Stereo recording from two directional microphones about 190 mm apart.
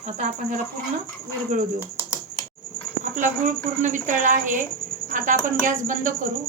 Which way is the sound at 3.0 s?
40° right (ahead or behind).